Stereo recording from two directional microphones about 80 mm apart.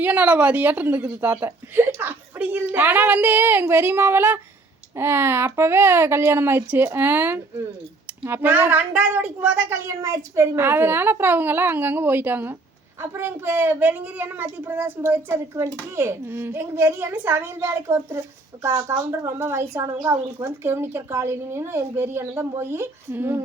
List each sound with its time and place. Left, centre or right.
0.0 s a woman's voice: right
10.0 s a woman's voice: right